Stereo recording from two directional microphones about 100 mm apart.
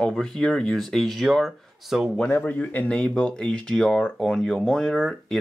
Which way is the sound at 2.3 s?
15° left (ahead or behind).